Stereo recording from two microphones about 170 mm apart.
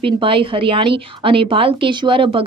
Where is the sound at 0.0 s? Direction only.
30° right (ahead or behind).